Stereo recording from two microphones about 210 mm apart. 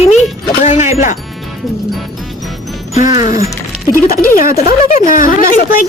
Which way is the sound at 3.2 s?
40° left (ahead or behind).